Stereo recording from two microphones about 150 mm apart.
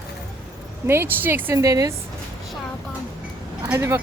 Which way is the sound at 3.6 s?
20° right (ahead or behind).